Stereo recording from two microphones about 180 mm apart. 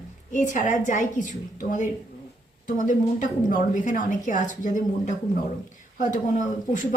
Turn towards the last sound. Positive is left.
turn(degrees=45)  # may be behind; listen again after turning